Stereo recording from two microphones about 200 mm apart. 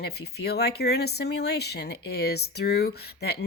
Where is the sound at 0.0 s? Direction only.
55° left (ahead or behind).